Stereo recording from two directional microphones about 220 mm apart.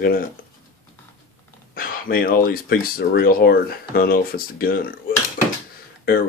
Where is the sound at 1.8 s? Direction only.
40° left (ahead or behind).